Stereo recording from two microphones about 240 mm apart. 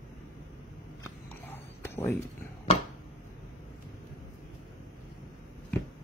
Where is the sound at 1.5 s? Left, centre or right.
Centre.